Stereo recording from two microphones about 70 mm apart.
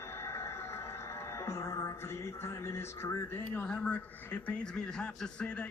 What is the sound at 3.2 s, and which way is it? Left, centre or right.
A man's voice, left.